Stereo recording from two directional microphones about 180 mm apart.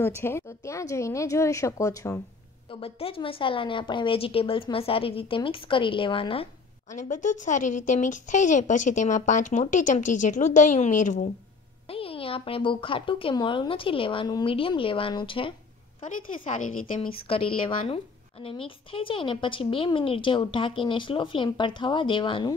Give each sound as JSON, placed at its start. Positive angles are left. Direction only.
{"t": 0.0, "sound": "a woman's voice", "side_deg": 15}
{"t": 2.7, "sound": "a woman's voice", "side_deg": 30}
{"t": 11.9, "sound": "a woman's voice", "side_deg": 30}
{"t": 16.1, "sound": "a woman's voice", "side_deg": 45}
{"t": 17.0, "sound": "a woman's voice", "side_deg": 30}